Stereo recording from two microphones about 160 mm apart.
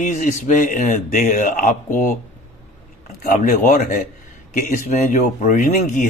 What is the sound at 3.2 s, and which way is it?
A man's voice, 55° left (ahead or behind).